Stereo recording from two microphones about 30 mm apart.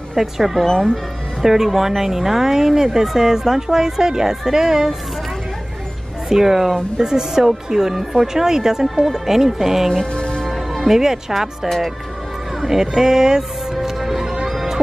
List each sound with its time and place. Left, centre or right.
0.1 s speech: centre
6.2 s speech: centre
10.1 s music: left
10.4 s music: centre
10.9 s speech: centre
13.7 s music: centre